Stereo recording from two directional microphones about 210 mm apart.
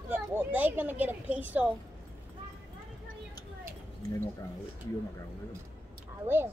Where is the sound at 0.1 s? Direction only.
10° right (ahead or behind).